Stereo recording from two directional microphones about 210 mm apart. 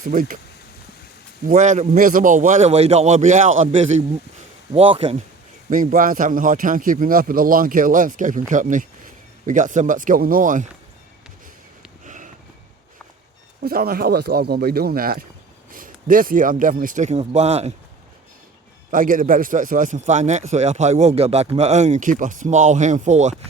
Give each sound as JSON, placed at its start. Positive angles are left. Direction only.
{"t": 0.0, "sound": "a man's voice", "side_deg": -40}
{"t": 1.5, "sound": "a man's voice", "side_deg": -35}
{"t": 5.7, "sound": "a man's voice", "side_deg": -40}
{"t": 12.0, "sound": "sniff", "side_deg": -35}
{"t": 13.6, "sound": "a man's voice", "side_deg": -45}
{"t": 18.9, "sound": "a man's voice", "side_deg": -40}